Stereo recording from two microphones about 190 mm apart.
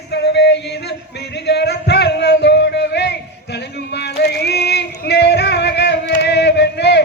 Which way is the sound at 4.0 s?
60° left (ahead or behind).